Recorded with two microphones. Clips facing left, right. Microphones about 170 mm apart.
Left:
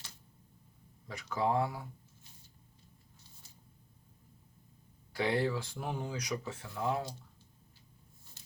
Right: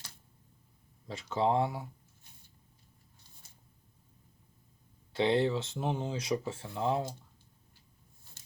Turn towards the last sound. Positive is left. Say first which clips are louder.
# right 3 dB
turn(degrees=-25)  # may be behind; listen again after turning